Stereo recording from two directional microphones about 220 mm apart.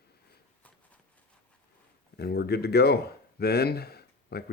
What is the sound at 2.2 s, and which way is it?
Speech, 45° left (ahead or behind).